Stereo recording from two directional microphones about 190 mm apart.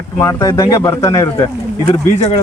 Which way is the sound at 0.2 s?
15° left (ahead or behind).